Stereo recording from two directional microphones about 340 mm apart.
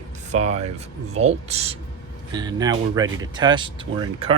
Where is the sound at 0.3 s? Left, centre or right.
Centre.